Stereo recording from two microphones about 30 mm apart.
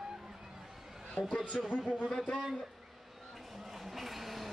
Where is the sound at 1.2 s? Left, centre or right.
Left.